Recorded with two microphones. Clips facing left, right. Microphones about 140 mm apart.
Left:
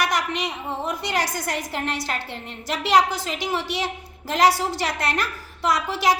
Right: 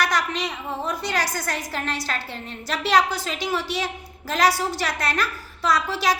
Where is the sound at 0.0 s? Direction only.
20° left (ahead or behind).